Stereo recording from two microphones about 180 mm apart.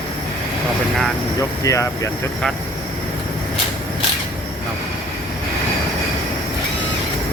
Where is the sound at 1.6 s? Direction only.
15° left (ahead or behind).